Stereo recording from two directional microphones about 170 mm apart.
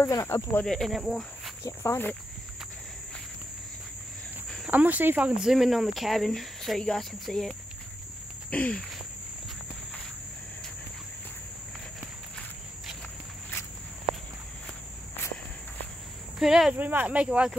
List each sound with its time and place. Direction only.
0.0 s cricket: 15° left (ahead or behind)
0.7 s speech: centre (ahead or behind)
1.6 s cricket: 15° left (ahead or behind)
4.6 s speech: 10° right (ahead or behind)
8.5 s a sound: 5° left (ahead or behind)
16.3 s speech: centre (ahead or behind)